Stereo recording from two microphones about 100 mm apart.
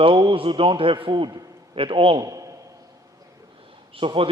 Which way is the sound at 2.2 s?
35° right (ahead or behind).